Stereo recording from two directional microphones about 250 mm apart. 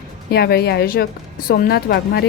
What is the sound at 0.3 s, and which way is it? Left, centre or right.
A woman's voice, left.